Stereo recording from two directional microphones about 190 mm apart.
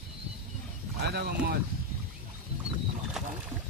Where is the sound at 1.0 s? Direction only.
60° right (ahead or behind).